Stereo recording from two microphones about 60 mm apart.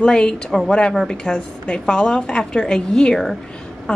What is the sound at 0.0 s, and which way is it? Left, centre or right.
A woman's voice, centre.